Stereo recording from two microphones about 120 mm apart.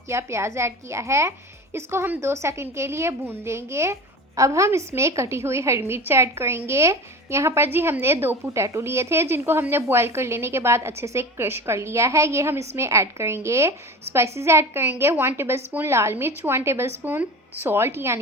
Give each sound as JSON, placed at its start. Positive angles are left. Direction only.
{"t": 0.1, "sound": "a woman's voice", "side_deg": -25}